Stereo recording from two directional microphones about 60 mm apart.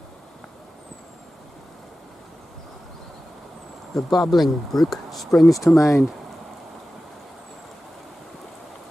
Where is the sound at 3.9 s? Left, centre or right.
Centre.